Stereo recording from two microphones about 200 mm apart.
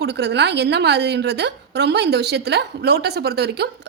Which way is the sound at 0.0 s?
55° right (ahead or behind).